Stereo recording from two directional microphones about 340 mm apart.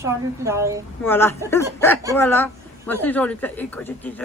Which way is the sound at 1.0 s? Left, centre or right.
Centre.